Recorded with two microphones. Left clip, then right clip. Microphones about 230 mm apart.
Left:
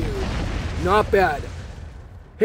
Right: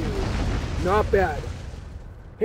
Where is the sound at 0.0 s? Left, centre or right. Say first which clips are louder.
Left 1 dB; centre.